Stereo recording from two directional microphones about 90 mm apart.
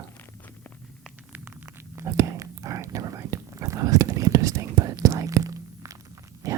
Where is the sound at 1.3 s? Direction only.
20° right (ahead or behind).